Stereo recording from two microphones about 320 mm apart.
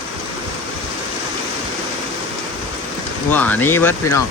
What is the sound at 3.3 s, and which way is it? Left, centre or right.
Speech, centre.